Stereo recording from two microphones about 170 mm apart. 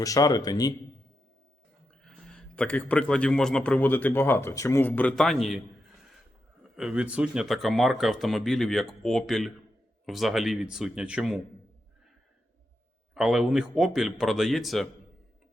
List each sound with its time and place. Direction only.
0.0 s a man's voice: 20° left (ahead or behind)
2.0 s a man's voice: 5° left (ahead or behind)
6.6 s speech: 5° right (ahead or behind)
13.1 s speech: 5° right (ahead or behind)